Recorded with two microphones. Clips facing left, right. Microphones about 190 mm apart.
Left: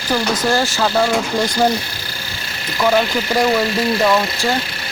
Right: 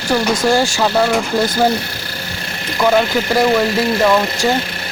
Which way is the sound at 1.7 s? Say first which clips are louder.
Right 2 dB; 60° right (ahead or behind).